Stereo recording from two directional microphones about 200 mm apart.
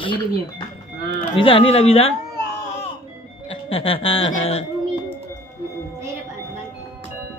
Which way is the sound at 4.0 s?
75° left (ahead or behind).